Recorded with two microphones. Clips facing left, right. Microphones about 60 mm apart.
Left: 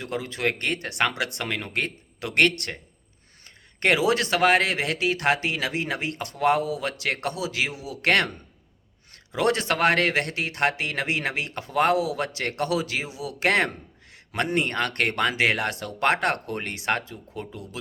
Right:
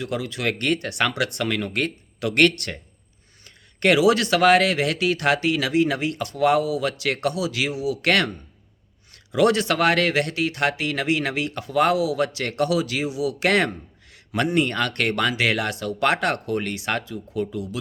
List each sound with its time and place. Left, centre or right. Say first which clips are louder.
0.0 s speech: right 1 dB; left